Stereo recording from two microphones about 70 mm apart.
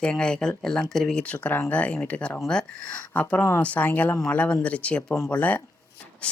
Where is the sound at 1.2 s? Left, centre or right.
Centre.